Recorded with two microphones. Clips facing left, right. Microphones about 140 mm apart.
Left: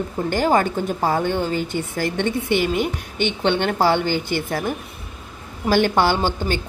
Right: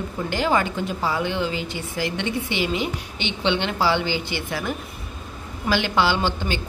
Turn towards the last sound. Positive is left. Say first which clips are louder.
# left 3 dB
turn(degrees=45)  # may be behind; listen again after turning